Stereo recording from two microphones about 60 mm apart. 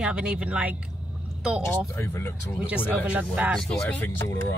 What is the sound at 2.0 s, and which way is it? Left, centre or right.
Speech, left.